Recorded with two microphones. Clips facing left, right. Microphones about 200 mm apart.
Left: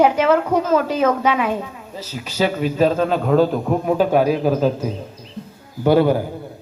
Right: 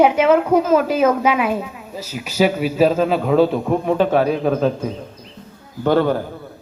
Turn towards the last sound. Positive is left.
turn(degrees=10)  # may be behind; listen again after turning